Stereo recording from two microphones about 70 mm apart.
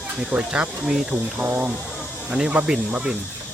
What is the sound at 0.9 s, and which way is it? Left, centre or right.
Speech, centre.